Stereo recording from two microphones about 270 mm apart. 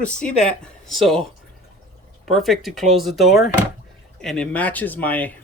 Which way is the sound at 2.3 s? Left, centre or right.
Centre.